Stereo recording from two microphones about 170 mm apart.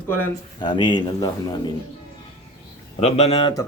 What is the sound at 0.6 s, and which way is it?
A man's voice, 25° left (ahead or behind).